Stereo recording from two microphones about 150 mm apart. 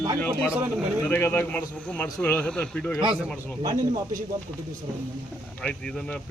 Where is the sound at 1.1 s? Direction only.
15° left (ahead or behind).